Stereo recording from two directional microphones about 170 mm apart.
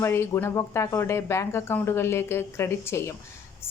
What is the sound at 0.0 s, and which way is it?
Speech, 15° left (ahead or behind).